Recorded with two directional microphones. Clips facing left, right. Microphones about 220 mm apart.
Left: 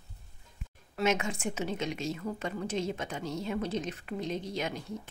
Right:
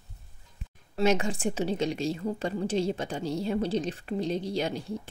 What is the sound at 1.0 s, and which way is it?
A woman's voice, 35° right (ahead or behind).